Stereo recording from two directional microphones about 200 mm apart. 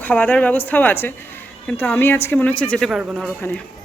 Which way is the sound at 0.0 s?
10° left (ahead or behind).